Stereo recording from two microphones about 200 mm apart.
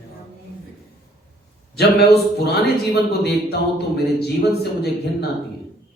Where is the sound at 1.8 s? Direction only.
55° left (ahead or behind).